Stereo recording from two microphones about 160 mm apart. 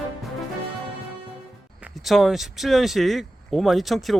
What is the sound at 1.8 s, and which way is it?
Speech, centre (ahead or behind).